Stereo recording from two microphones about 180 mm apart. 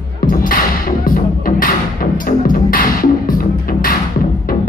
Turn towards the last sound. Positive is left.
turn(degrees=50)  # may be behind; listen again after turning